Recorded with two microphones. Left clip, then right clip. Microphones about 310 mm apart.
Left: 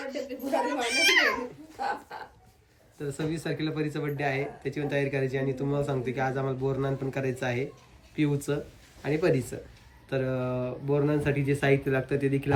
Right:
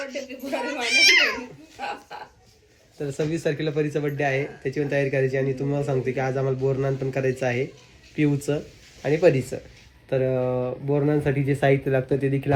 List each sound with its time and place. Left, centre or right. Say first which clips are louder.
0.1 s a child's voice: even; left
3.3 s speech: right 7 dB; centre